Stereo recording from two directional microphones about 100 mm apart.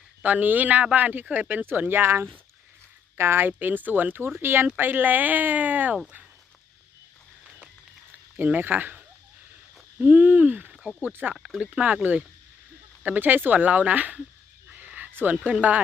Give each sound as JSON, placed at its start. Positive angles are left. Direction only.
{"t": 0.2, "sound": "speech", "side_deg": -15}
{"t": 8.4, "sound": "speech", "side_deg": -20}
{"t": 11.3, "sound": "speech", "side_deg": -5}
{"t": 11.6, "sound": "speech", "side_deg": -15}
{"t": 14.7, "sound": "a sound", "side_deg": -15}